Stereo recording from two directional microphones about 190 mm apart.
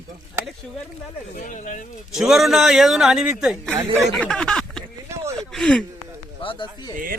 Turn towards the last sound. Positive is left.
turn(degrees=25)  # may be behind; listen again after turning